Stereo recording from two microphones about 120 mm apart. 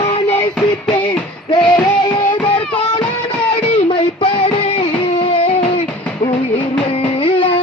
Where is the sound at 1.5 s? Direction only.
45° left (ahead or behind).